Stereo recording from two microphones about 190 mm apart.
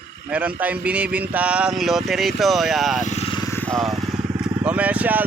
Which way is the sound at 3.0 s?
35° left (ahead or behind).